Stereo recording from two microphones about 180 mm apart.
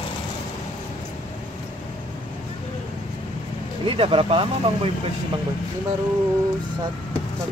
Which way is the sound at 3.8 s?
30° right (ahead or behind).